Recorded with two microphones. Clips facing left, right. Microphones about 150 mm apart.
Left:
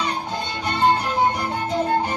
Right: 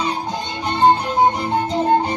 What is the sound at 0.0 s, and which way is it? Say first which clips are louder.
Music: right 3 dB; 15° right (ahead or behind).